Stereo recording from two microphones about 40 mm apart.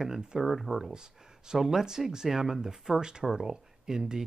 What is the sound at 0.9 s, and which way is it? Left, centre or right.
Speech, centre.